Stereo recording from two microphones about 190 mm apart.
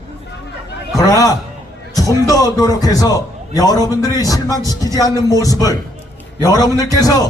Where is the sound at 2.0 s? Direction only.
20° left (ahead or behind).